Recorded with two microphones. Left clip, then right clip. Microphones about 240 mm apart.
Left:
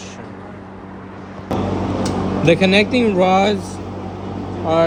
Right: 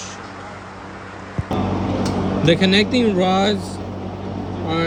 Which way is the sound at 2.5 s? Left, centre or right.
Centre.